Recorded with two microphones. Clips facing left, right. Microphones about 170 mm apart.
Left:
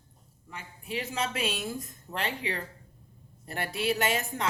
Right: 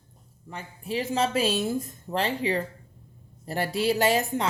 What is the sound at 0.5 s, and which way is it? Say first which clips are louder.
Speech: right 6 dB; 30° right (ahead or behind).